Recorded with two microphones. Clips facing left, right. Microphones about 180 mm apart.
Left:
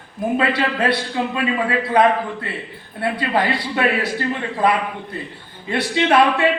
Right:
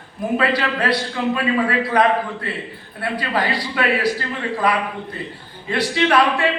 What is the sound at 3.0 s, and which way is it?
A man's voice, 25° left (ahead or behind).